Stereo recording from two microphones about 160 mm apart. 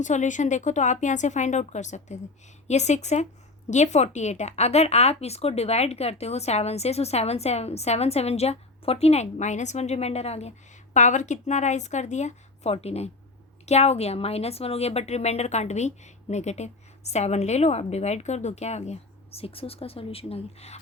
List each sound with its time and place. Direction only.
0.0 s a woman's voice: 50° left (ahead or behind)